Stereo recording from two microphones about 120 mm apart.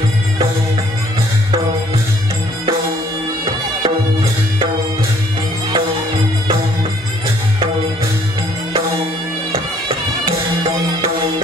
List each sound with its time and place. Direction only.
3.8 s music: 35° right (ahead or behind)